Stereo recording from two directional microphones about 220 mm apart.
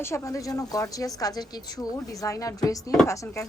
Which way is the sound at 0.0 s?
15° left (ahead or behind).